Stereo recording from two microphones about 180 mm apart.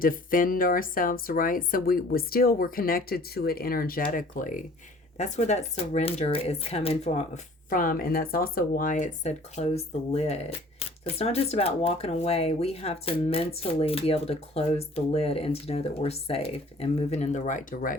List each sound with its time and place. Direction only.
0.0 s speech: 50° left (ahead or behind)
7.7 s speech: 50° left (ahead or behind)